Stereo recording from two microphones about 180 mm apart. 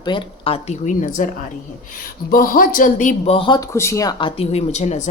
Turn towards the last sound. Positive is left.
turn(degrees=40)  # may be behind; listen again after turning